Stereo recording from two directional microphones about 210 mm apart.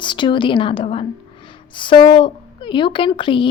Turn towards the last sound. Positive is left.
turn(degrees=25)  # may be behind; listen again after turning